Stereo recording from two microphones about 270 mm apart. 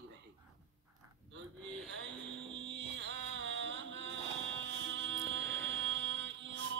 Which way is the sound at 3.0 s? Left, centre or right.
Right.